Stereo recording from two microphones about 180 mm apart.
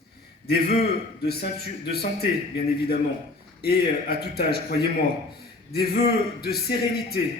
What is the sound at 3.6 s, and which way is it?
Speech, 60° left (ahead or behind).